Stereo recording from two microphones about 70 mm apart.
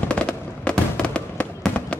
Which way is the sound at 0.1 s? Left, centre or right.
Centre.